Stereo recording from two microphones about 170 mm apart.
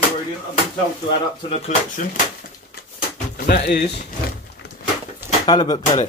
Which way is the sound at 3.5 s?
70° left (ahead or behind).